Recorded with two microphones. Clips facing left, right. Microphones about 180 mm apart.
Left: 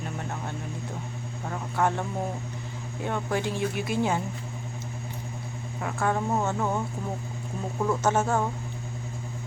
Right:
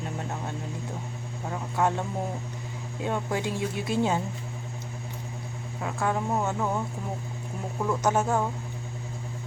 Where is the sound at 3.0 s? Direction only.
20° right (ahead or behind).